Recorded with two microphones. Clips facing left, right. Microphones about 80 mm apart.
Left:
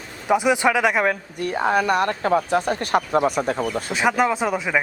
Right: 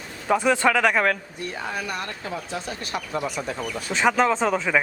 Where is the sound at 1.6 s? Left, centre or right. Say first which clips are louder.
Left 12 dB; left.